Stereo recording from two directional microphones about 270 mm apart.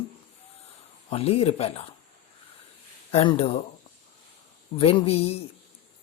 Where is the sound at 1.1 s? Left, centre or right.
Left.